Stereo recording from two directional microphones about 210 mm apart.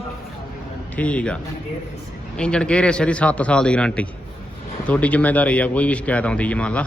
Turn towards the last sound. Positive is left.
turn(degrees=5)  # may be behind; listen again after turning